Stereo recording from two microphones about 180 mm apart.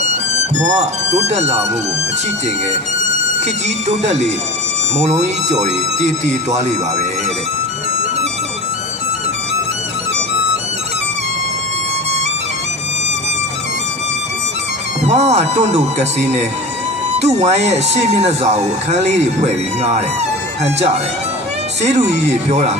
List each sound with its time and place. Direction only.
0.8 s speech: 40° right (ahead or behind)
3.4 s speech: 40° right (ahead or behind)
15.0 s speech: 35° right (ahead or behind)